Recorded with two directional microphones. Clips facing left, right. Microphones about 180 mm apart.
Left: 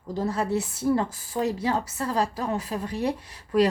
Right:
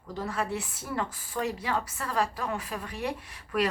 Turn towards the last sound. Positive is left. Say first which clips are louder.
# left 7 dB
turn(degrees=35)  # may be behind; listen again after turning